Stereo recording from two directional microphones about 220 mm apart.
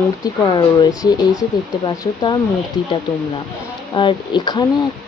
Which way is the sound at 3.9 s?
20° left (ahead or behind).